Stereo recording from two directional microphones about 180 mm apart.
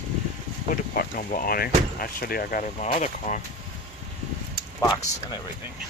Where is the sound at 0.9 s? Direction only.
50° left (ahead or behind).